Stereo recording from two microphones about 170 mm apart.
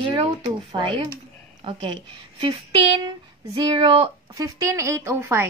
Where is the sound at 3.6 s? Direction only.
30° right (ahead or behind).